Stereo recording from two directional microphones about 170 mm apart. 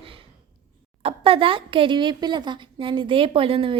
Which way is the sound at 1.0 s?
35° right (ahead or behind).